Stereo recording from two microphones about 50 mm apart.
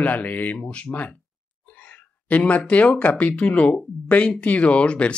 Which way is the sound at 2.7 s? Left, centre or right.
Left.